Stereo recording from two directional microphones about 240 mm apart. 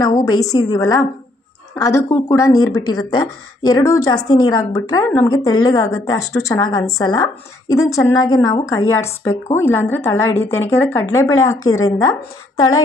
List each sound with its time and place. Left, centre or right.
0.0 s a woman's voice: centre